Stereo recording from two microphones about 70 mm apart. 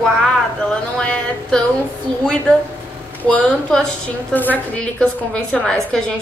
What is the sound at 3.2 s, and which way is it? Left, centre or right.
A woman's voice, centre.